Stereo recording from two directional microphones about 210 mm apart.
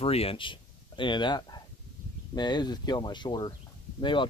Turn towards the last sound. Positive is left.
turn(degrees=25)  # may be behind; listen again after turning